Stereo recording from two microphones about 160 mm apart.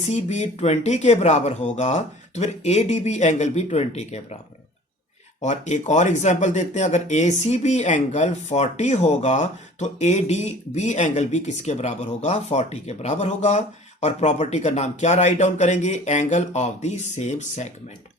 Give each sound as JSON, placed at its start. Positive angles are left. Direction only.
{"t": 0.1, "sound": "speech", "side_deg": 45}
{"t": 5.4, "sound": "speech", "side_deg": 45}